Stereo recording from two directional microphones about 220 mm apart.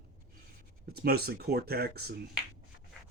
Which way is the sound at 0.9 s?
45° right (ahead or behind).